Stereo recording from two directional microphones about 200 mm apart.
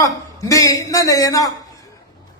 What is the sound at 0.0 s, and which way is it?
A man's voice, 15° left (ahead or behind).